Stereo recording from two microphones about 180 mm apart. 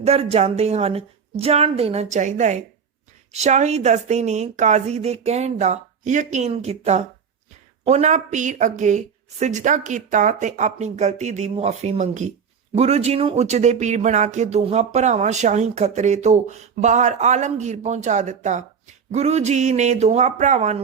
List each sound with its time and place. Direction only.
0.0 s speech: 35° right (ahead or behind)